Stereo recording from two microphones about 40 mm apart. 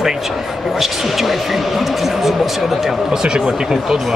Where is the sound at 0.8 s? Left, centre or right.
Centre.